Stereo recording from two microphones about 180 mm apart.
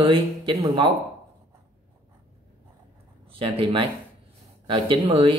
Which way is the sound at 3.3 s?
30° right (ahead or behind).